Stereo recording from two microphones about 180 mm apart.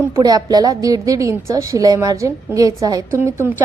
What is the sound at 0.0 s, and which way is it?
A woman's voice, 20° right (ahead or behind).